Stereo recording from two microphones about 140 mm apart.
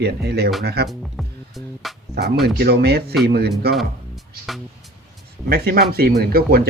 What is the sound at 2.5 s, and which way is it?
Speech, 90° right.